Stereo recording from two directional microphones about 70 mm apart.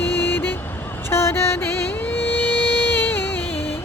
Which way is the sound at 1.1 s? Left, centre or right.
Left.